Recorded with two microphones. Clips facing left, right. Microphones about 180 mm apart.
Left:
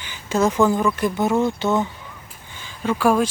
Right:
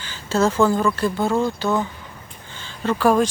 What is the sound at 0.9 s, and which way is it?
Speech, 20° left (ahead or behind).